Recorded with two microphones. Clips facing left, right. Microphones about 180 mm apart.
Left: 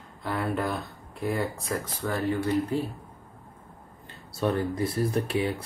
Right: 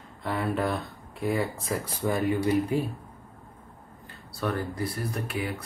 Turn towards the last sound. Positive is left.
turn(degrees=25)  # may be behind; listen again after turning